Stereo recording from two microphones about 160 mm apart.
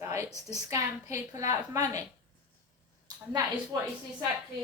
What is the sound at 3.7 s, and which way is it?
Speech, 25° right (ahead or behind).